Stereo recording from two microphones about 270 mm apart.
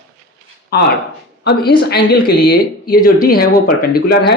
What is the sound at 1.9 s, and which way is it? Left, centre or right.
Speech, left.